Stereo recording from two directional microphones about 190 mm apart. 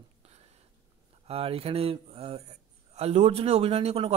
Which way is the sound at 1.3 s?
30° right (ahead or behind).